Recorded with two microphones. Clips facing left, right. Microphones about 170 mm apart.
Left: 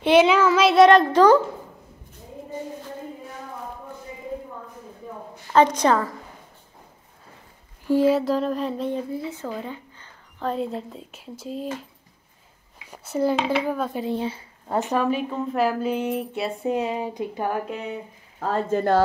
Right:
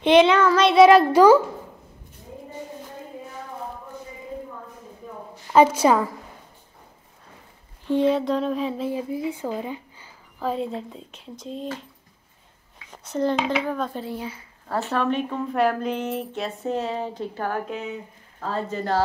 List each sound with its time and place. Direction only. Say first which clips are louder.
0.0 s speech: right 1 dB; 5° left (ahead or behind)
5.5 s a woman's voice: right 1 dB; 10° right (ahead or behind)
7.8 s speech: left 2 dB; 5° left (ahead or behind)
12.9 s a woman's voice: left 1 dB; 10° left (ahead or behind)
14.0 s a woman's voice: left 6 dB; 25° left (ahead or behind)
18.7 s speech: left 5 dB; 55° left (ahead or behind)